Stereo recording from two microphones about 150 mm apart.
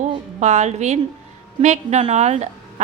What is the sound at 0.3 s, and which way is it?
A woman's voice, 50° right (ahead or behind).